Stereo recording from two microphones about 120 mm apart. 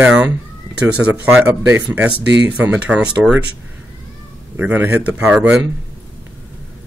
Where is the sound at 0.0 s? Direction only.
10° right (ahead or behind).